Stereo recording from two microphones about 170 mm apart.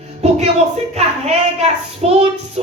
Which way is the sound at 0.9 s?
40° right (ahead or behind).